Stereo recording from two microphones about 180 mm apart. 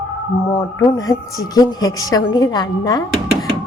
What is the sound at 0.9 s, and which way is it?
A woman's voice, 20° left (ahead or behind).